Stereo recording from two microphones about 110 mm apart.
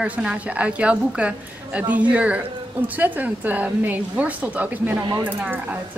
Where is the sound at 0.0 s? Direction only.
10° right (ahead or behind).